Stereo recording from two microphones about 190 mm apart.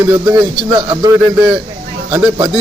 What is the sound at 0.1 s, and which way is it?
A man's voice, 15° right (ahead or behind).